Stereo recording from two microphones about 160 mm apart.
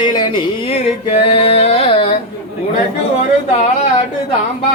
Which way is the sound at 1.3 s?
35° left (ahead or behind).